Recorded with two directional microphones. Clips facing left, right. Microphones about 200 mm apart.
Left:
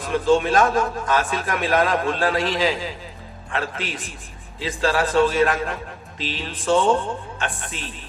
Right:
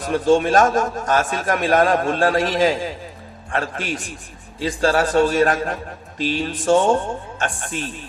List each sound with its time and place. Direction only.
0.0 s a man's voice: 45° right (ahead or behind)